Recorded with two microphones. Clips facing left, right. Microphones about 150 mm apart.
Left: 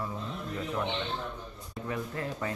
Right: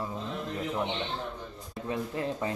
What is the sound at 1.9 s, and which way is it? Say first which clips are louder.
Speech: right 3 dB; 20° right (ahead or behind).